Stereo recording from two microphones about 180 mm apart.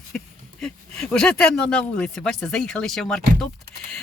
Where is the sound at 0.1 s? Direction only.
5° left (ahead or behind).